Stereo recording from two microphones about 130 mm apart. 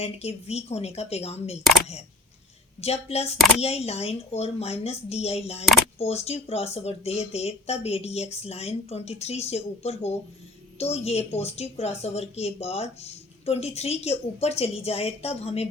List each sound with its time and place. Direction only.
0.0 s a woman's voice: 55° left (ahead or behind)
2.8 s a woman's voice: 55° left (ahead or behind)